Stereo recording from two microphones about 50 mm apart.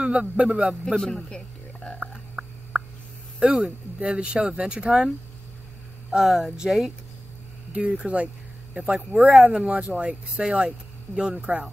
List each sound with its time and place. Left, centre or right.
0.0 s speech: centre
0.9 s speech: centre
3.3 s speech: centre
6.1 s speech: centre
6.5 s speech: centre
7.7 s speech: right
9.3 s speech: centre
9.6 s speech: right